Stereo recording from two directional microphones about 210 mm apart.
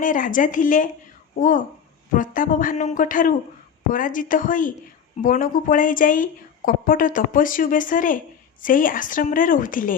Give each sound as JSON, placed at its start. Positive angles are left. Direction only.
{"t": 0.0, "sound": "a woman's voice", "side_deg": 40}